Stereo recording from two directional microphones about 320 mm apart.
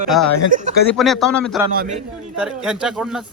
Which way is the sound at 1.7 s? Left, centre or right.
Right.